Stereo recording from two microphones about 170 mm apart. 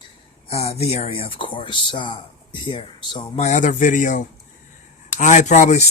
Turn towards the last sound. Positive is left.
turn(degrees=45)  # may be behind; listen again after turning